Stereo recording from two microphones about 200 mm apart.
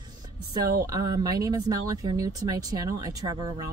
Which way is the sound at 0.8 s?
20° right (ahead or behind).